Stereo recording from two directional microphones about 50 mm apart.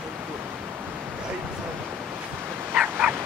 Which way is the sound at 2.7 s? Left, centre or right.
Centre.